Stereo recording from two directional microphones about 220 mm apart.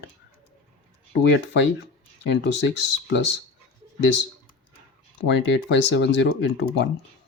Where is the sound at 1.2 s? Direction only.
50° left (ahead or behind).